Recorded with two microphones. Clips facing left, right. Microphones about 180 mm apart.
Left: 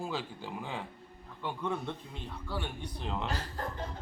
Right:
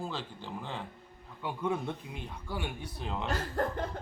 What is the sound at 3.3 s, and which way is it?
Speech, 50° right (ahead or behind).